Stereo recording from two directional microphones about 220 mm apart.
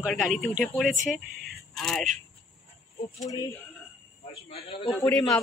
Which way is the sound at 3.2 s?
15° left (ahead or behind).